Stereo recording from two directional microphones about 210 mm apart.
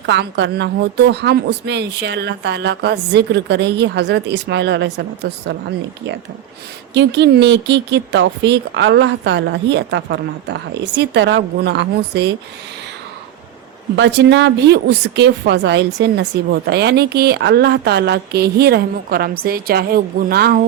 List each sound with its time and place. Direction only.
0.0 s a woman's voice: 55° right (ahead or behind)
6.9 s speech: 55° right (ahead or behind)
13.9 s a woman's voice: 55° right (ahead or behind)